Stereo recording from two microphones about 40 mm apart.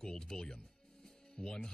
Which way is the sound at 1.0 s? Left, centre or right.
Centre.